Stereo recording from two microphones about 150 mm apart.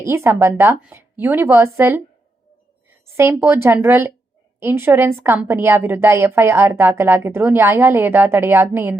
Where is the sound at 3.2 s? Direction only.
15° right (ahead or behind).